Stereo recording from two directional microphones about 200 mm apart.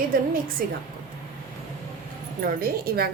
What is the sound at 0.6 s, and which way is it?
Speech, 50° right (ahead or behind).